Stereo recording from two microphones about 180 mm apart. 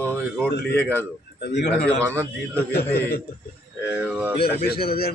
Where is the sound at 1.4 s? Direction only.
70° left (ahead or behind).